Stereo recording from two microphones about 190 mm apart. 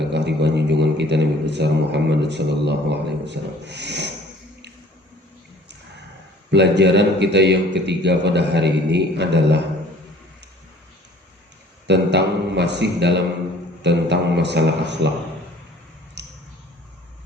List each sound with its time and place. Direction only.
0.1 s a man's voice: 65° right (ahead or behind)
6.5 s a man's voice: 65° right (ahead or behind)
11.9 s a man's voice: 65° right (ahead or behind)
16.2 s a sound: 65° right (ahead or behind)